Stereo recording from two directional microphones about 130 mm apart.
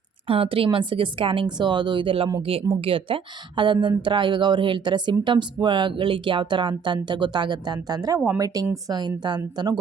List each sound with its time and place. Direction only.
0.3 s speech: 45° right (ahead or behind)
8.2 s speech: 15° right (ahead or behind)
8.9 s speech: 35° right (ahead or behind)